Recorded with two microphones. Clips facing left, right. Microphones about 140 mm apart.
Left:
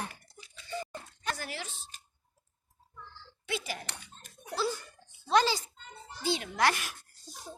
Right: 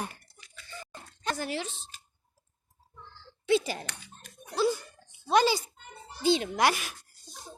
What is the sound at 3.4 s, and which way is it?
Speech, 30° right (ahead or behind).